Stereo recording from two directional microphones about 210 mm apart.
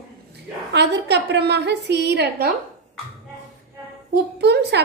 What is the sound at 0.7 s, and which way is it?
A woman's voice, 55° right (ahead or behind).